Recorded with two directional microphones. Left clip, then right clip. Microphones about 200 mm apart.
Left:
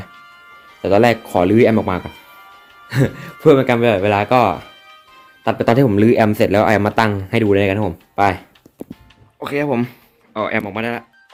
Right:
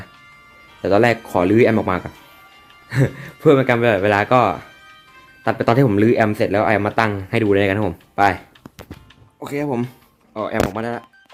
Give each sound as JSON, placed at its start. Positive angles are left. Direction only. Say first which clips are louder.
{"t": 0.8, "sound": "speech", "louder": "left 2 dB", "side_deg": -5}
{"t": 2.9, "sound": "speech", "louder": "left 2 dB", "side_deg": 5}
{"t": 10.7, "sound": "speech", "louder": "left 2 dB", "side_deg": -15}